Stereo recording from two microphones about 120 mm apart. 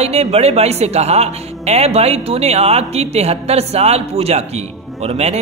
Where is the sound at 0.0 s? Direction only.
60° right (ahead or behind).